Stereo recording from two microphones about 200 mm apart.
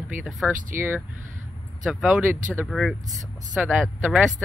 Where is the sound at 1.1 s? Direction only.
40° right (ahead or behind).